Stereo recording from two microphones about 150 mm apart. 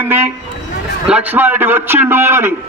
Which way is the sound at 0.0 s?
15° right (ahead or behind).